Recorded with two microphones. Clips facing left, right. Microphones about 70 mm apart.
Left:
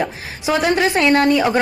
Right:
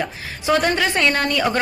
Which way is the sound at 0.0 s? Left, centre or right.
Centre.